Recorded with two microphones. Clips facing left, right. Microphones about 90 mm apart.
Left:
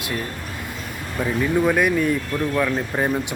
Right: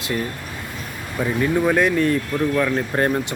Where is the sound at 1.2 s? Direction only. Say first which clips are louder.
Even; centre (ahead or behind).